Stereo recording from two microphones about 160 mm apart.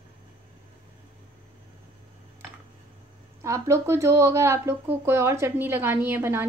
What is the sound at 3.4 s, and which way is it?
Speech, 20° right (ahead or behind).